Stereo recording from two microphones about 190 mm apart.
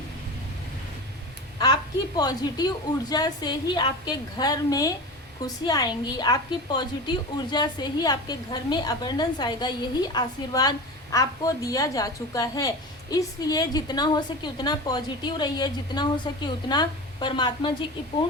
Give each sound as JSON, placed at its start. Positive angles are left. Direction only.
{"t": 1.5, "sound": "a woman's voice", "side_deg": 20}